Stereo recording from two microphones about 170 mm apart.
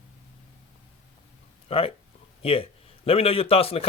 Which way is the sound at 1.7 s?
35° left (ahead or behind).